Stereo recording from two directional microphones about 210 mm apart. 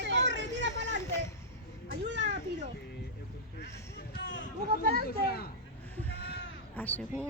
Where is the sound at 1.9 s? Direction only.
55° right (ahead or behind).